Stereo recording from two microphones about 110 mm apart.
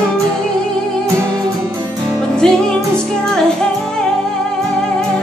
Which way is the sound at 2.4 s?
5° left (ahead or behind).